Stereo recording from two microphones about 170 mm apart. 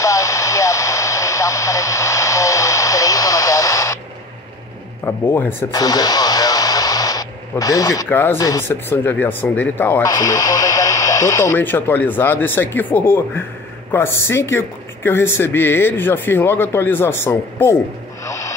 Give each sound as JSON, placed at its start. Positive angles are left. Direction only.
{"t": 0.0, "sound": "radio", "side_deg": 20}
{"t": 5.0, "sound": "speech", "side_deg": 10}
{"t": 10.0, "sound": "speech", "side_deg": 20}
{"t": 18.2, "sound": "music", "side_deg": 20}